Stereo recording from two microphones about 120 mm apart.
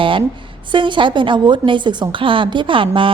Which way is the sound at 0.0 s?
45° right (ahead or behind).